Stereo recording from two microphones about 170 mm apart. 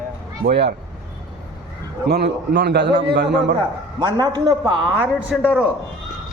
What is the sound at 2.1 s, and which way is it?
A man's voice, 70° right (ahead or behind).